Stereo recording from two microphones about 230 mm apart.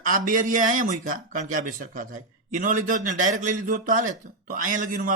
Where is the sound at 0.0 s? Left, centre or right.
Right.